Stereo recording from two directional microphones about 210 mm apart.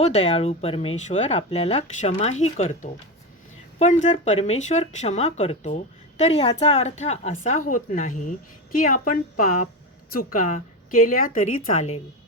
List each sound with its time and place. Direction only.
0.0 s speech: 30° left (ahead or behind)